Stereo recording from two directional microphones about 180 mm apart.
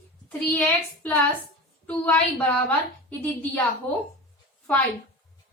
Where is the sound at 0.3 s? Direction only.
10° left (ahead or behind).